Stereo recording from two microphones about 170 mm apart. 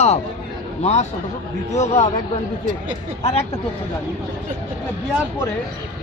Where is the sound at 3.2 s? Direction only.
40° left (ahead or behind).